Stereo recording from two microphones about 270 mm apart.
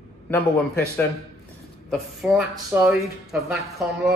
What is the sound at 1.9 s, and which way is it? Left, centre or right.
Speech, centre.